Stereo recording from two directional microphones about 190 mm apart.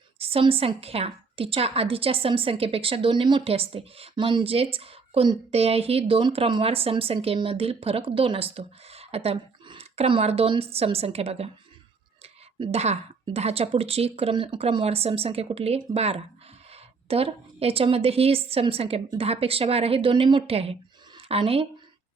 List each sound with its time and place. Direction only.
0.2 s a woman's voice: 30° right (ahead or behind)